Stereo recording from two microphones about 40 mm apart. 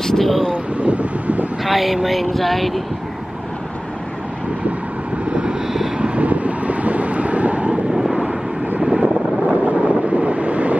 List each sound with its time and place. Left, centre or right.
0.0 s vehicle: centre
0.7 s a sound: right
1.6 s speech: centre
2.0 s a sound: centre
5.3 s vehicle: right
7.9 s vehicle: centre
9.0 s vehicle: right